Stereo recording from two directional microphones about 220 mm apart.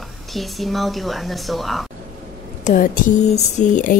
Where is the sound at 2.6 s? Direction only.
35° left (ahead or behind).